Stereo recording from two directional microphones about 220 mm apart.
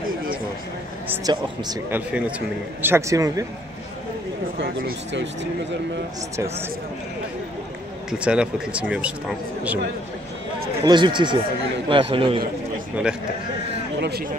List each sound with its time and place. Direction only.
0.0 s a sound: 40° right (ahead or behind)
1.0 s a man's voice: 10° right (ahead or behind)
4.6 s speech: 50° right (ahead or behind)
6.3 s a man's voice: 10° right (ahead or behind)
8.1 s speech: 5° right (ahead or behind)
10.8 s speech: 20° right (ahead or behind)
13.9 s speech: 50° right (ahead or behind)